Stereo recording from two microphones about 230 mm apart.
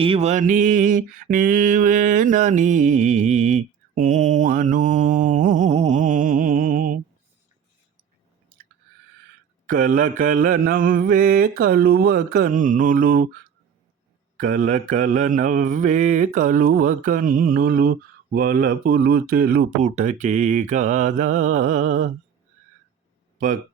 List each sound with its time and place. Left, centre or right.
0.0 s mantra: right
9.6 s mantra: right
14.4 s mantra: right